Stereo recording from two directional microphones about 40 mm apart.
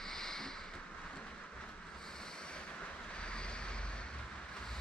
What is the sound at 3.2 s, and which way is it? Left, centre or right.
Vehicle, left.